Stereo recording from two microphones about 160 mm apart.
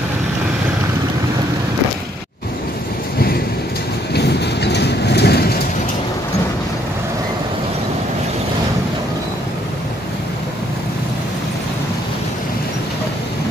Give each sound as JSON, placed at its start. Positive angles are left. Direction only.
{"t": 4.1, "sound": "vehicle", "side_deg": 90}